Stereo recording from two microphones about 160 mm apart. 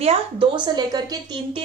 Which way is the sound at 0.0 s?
35° right (ahead or behind).